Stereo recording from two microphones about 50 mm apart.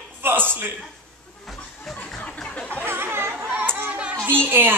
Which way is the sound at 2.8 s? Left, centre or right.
Right.